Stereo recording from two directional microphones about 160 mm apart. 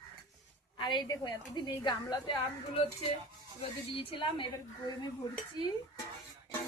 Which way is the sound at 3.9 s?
35° left (ahead or behind).